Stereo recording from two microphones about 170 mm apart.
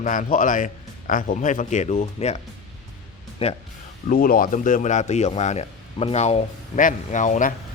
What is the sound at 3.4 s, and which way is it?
Speech, 35° left (ahead or behind).